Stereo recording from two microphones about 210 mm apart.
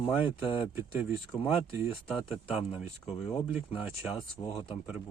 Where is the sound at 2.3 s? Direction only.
5° right (ahead or behind).